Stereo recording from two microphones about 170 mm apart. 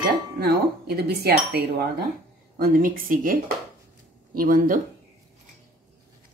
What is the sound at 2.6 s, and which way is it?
A woman's voice, 55° right (ahead or behind).